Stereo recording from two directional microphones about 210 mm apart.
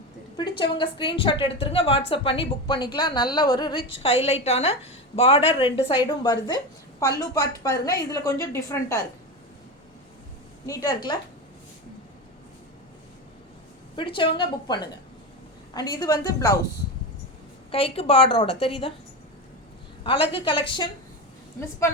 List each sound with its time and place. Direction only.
0.6 s a woman's voice: 25° left (ahead or behind)
10.7 s a woman's voice: 15° left (ahead or behind)
13.9 s a woman's voice: 25° left (ahead or behind)
17.7 s a woman's voice: 25° left (ahead or behind)
20.1 s a woman's voice: 25° left (ahead or behind)